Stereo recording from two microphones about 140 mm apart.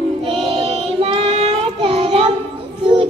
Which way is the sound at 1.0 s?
45° right (ahead or behind).